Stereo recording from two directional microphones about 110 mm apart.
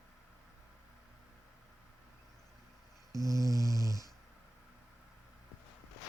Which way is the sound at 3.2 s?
30° right (ahead or behind).